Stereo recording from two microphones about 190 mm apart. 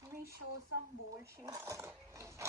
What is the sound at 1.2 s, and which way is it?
Speech, 15° right (ahead or behind).